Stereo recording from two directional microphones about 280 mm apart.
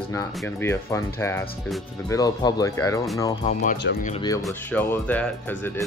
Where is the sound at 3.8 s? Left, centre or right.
Left.